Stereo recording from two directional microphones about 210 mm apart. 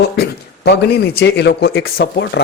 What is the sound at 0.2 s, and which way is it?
A man's voice, 50° left (ahead or behind).